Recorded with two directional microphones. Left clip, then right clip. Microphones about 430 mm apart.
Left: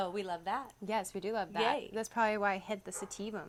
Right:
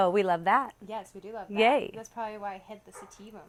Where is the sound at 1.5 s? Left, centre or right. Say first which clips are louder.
Right 11 dB; right.